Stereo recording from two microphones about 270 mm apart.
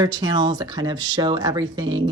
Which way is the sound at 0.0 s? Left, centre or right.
Centre.